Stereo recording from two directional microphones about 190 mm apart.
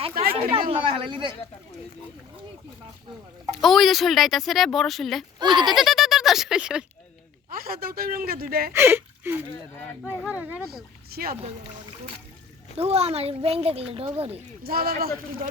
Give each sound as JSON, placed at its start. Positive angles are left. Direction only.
{"t": 0.1, "sound": "chatter", "side_deg": -50}
{"t": 0.7, "sound": "speech", "side_deg": -25}
{"t": 3.6, "sound": "speech", "side_deg": 0}
{"t": 5.4, "sound": "speech", "side_deg": -25}
{"t": 5.7, "sound": "speech", "side_deg": 0}
{"t": 7.5, "sound": "speech", "side_deg": -50}
{"t": 8.7, "sound": "speech", "side_deg": -10}
{"t": 10.0, "sound": "speech", "side_deg": 10}
{"t": 10.2, "sound": "speech", "side_deg": -10}
{"t": 11.1, "sound": "speech", "side_deg": -50}
{"t": 12.7, "sound": "speech", "side_deg": -30}
{"t": 14.6, "sound": "speech", "side_deg": -55}